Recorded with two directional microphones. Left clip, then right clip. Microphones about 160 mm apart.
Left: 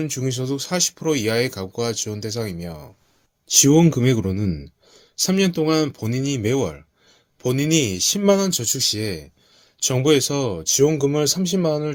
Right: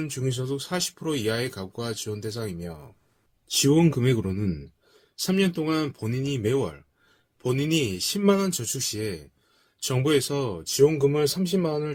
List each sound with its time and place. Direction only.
0.0 s speech: 45° left (ahead or behind)